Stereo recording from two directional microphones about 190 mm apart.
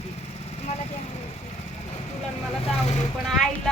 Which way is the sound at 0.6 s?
35° left (ahead or behind).